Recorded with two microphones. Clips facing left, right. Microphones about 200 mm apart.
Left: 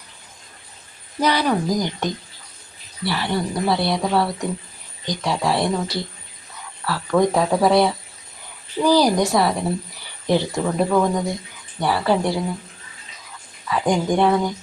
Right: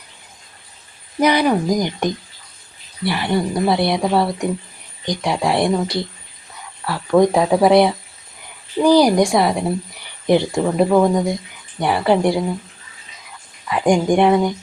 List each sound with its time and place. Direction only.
1.2 s speech: 10° right (ahead or behind)
13.7 s speech: 15° right (ahead or behind)